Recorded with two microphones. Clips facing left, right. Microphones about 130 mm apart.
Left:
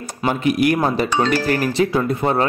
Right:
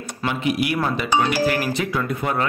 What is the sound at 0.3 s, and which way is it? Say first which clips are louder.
A man's voice: left 5 dB; 45° left (ahead or behind).